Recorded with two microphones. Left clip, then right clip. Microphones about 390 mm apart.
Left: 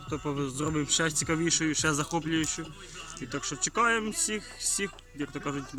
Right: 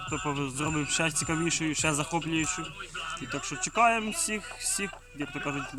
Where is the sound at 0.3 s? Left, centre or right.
Centre.